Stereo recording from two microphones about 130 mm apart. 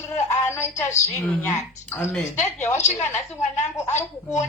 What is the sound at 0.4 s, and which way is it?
Speech, 20° left (ahead or behind).